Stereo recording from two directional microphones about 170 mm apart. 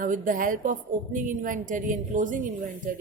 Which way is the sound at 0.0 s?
50° right (ahead or behind).